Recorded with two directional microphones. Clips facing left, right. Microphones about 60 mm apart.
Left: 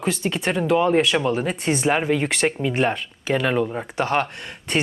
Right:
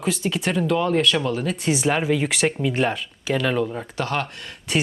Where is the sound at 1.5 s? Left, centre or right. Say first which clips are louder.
Even; centre.